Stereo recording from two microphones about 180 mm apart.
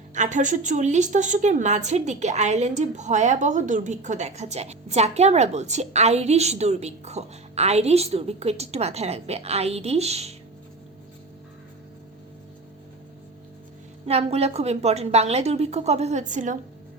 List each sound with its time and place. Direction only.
0.1 s a woman's voice: 40° right (ahead or behind)
14.1 s a woman's voice: 35° right (ahead or behind)